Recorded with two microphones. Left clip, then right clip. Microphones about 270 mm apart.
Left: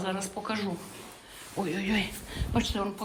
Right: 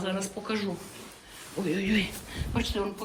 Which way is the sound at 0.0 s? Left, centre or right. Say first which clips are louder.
Even; centre.